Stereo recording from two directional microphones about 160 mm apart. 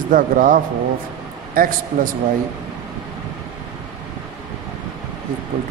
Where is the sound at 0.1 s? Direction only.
60° right (ahead or behind).